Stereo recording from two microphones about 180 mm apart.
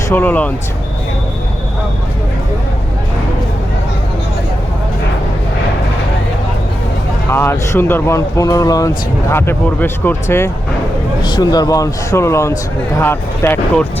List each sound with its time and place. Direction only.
0.1 s speech: 10° left (ahead or behind)
7.3 s speech: 15° left (ahead or behind)
11.2 s a man's voice: 25° left (ahead or behind)